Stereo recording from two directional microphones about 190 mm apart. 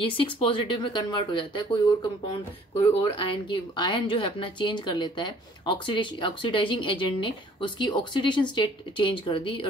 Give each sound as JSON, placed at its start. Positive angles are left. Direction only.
{"t": 0.0, "sound": "speech", "side_deg": 25}